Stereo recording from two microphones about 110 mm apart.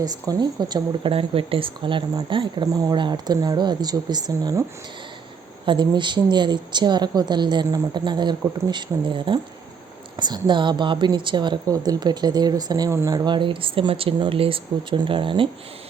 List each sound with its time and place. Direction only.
0.0 s speech: 35° right (ahead or behind)
1.1 s a woman's voice: 55° right (ahead or behind)
2.7 s speech: 35° right (ahead or behind)
5.6 s a woman's voice: 45° right (ahead or behind)